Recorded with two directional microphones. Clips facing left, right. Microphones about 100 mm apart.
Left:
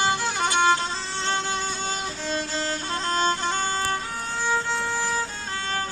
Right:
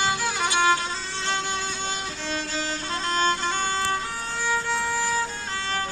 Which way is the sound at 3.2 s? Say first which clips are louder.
Even; 25° left (ahead or behind).